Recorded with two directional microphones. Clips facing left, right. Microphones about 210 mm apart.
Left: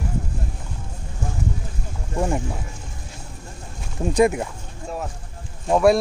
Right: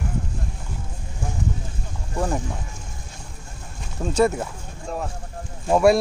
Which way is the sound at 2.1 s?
5° left (ahead or behind).